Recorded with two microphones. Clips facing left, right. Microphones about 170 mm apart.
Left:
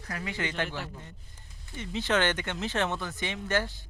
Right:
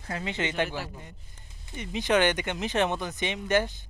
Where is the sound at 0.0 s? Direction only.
25° right (ahead or behind).